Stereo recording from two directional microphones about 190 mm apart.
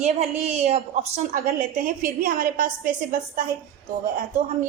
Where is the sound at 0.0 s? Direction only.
35° right (ahead or behind).